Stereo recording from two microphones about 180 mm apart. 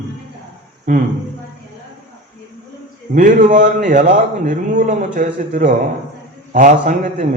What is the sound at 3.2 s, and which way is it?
A man's voice, 45° right (ahead or behind).